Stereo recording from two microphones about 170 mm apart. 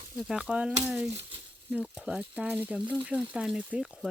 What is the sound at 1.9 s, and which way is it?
Speech, 5° right (ahead or behind).